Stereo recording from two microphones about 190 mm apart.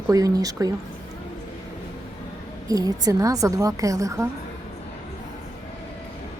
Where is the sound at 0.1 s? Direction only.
20° right (ahead or behind).